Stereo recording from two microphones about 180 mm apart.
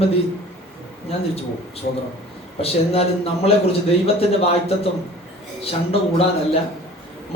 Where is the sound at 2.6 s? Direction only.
35° left (ahead or behind).